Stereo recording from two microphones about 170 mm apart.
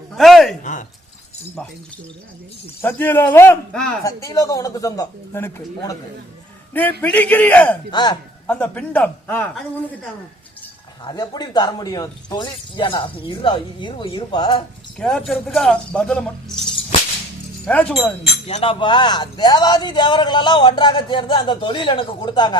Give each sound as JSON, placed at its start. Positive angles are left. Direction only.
{"t": 0.2, "sound": "a sound", "side_deg": 0}
{"t": 0.6, "sound": "a sound", "side_deg": 45}
{"t": 1.6, "sound": "speech", "side_deg": 5}
{"t": 2.8, "sound": "a man's voice", "side_deg": 10}
{"t": 4.0, "sound": "speech", "side_deg": 20}
{"t": 7.0, "sound": "a man's voice", "side_deg": 10}
{"t": 7.9, "sound": "speech", "side_deg": 25}
{"t": 8.4, "sound": "a man's voice", "side_deg": 10}
{"t": 11.0, "sound": "speech", "side_deg": 25}
{"t": 14.9, "sound": "speech", "side_deg": 5}
{"t": 17.7, "sound": "a man's voice", "side_deg": 10}
{"t": 18.4, "sound": "speech", "side_deg": 35}